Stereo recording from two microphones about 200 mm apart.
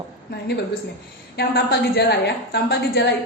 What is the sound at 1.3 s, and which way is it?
Speech, 50° left (ahead or behind).